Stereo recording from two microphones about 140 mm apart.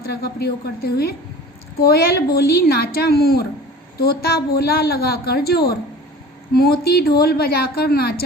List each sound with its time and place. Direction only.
0.0 s a woman's voice: 90° left